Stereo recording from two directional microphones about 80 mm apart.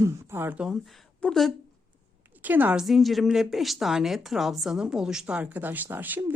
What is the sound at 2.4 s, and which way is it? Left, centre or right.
Speech, right.